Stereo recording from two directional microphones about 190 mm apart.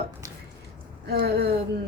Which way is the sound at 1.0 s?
60° right (ahead or behind).